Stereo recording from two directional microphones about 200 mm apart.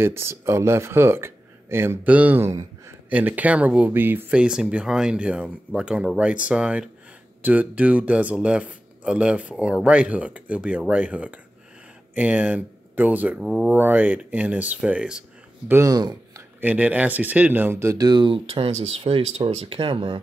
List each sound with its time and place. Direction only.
0.0 s speech: 10° right (ahead or behind)
15.7 s speech: 15° right (ahead or behind)
16.6 s speech: 5° right (ahead or behind); by 20.2 s 25° right (ahead or behind)